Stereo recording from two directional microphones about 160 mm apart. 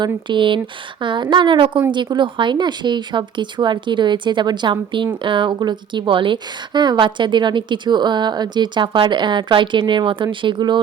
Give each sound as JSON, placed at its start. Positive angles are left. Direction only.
{"t": 0.3, "sound": "a woman's voice", "side_deg": -30}